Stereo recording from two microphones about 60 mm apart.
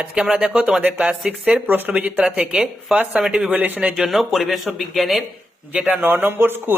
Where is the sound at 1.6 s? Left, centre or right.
Right.